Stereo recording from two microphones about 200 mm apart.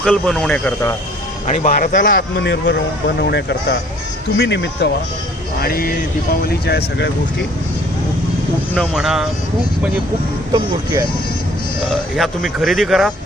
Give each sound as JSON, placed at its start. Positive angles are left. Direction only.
{"t": 0.0, "sound": "a man's voice", "side_deg": 5}
{"t": 1.5, "sound": "speech", "side_deg": 40}
{"t": 2.3, "sound": "a man's voice", "side_deg": 60}
{"t": 5.6, "sound": "speech", "side_deg": 50}
{"t": 8.7, "sound": "a man's voice", "side_deg": 0}
{"t": 10.5, "sound": "speech", "side_deg": -20}
{"t": 11.9, "sound": "a man's voice", "side_deg": 0}